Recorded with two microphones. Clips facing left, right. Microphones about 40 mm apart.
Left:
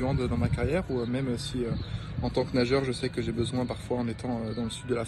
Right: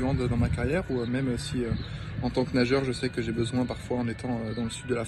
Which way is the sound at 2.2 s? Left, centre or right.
Left.